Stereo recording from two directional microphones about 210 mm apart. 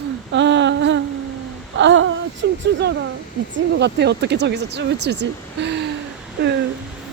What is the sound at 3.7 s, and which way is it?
Speech, 55° right (ahead or behind).